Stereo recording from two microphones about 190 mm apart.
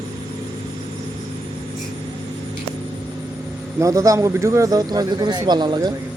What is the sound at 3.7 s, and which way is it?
Speech, 15° right (ahead or behind).